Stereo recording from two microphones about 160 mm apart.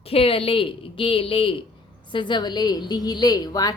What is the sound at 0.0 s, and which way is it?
A woman's voice, 35° left (ahead or behind).